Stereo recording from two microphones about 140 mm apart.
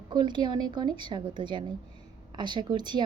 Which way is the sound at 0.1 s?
35° right (ahead or behind).